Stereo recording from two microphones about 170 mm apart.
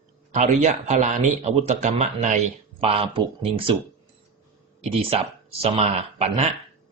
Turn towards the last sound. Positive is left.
turn(degrees=-35)  # may be behind; listen again after turning